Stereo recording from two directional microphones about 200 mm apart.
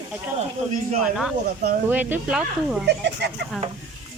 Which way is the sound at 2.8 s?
60° right (ahead or behind).